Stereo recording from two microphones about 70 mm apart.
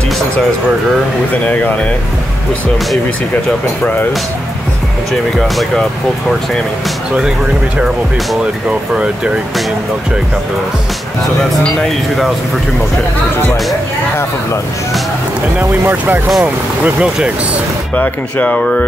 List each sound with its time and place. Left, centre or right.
1.3 s speech: left
11.5 s speech: centre
15.7 s speech: right
16.3 s speech: centre
17.9 s speech: left